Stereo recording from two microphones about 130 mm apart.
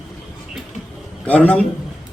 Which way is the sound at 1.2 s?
10° left (ahead or behind).